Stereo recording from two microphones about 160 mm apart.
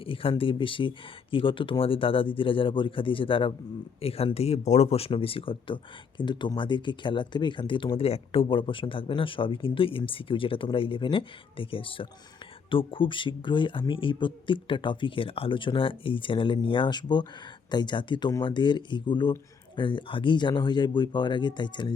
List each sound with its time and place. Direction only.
0.0 s speech: 35° left (ahead or behind)